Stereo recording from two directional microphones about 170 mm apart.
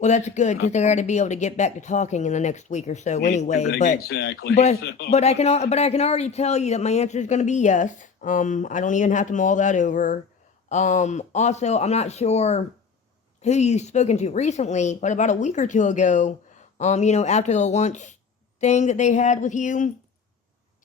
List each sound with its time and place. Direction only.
0.0 s speech: 45° left (ahead or behind)
3.9 s speech: 80° left
4.5 s speech: 40° left (ahead or behind)
4.8 s speech: 75° left (ahead or behind)
5.1 s speech: 40° left (ahead or behind)